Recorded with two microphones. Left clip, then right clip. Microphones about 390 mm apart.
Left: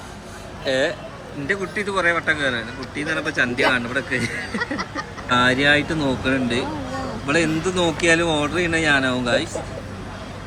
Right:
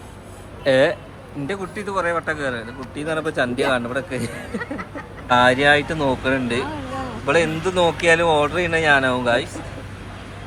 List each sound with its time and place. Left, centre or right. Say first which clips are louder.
0.6 s speech: right 5 dB; centre
1.5 s speech: left 4 dB; centre
5.3 s speech: right 2 dB; centre